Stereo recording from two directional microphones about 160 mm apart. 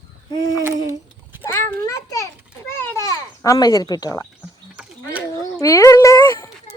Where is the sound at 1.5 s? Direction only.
15° left (ahead or behind).